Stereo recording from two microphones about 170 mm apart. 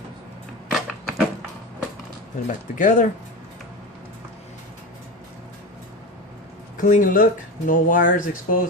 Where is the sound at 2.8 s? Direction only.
50° left (ahead or behind).